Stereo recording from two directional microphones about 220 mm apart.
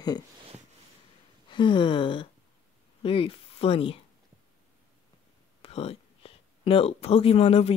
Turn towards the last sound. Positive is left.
turn(degrees=25)  # may be behind; listen again after turning